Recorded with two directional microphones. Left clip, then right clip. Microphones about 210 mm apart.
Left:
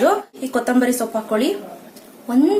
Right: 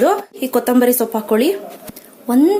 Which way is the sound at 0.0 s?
35° right (ahead or behind).